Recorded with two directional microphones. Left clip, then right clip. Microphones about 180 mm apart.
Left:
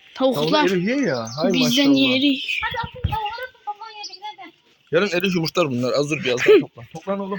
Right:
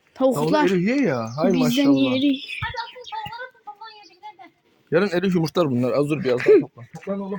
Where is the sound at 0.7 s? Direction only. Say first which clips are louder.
Even; 60° right (ahead or behind).